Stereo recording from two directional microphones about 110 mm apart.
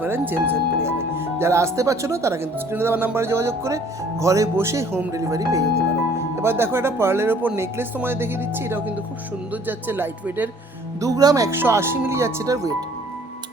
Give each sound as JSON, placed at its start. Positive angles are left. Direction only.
{"t": 0.0, "sound": "speech", "side_deg": -20}
{"t": 11.0, "sound": "speech", "side_deg": -35}
{"t": 11.5, "sound": "speech", "side_deg": -20}